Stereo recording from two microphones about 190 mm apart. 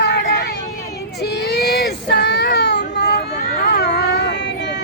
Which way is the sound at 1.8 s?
65° left (ahead or behind).